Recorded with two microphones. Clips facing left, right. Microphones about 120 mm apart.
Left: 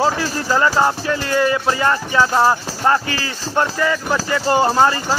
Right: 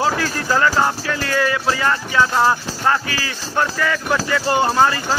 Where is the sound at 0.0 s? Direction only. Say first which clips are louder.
Left 1 dB; 15° left (ahead or behind).